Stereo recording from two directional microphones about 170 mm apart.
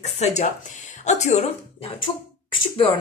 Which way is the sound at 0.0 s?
40° left (ahead or behind).